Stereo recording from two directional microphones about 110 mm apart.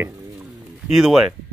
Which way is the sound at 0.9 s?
5° right (ahead or behind).